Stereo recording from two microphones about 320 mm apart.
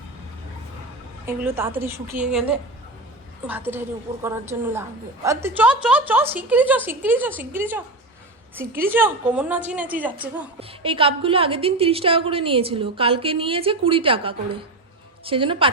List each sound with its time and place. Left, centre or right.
1.3 s a woman's voice: centre
10.6 s a woman's voice: centre